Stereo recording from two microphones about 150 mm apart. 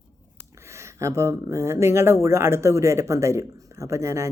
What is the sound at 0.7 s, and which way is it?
Speech, 20° right (ahead or behind).